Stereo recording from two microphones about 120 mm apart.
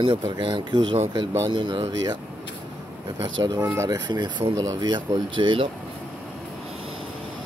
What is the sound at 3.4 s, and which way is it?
Speech, 35° right (ahead or behind).